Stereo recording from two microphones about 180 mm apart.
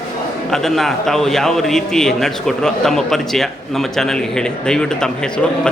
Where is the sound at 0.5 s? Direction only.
Centre (ahead or behind).